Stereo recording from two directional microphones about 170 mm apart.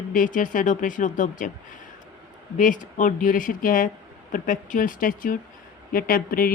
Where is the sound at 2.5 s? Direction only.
50° left (ahead or behind).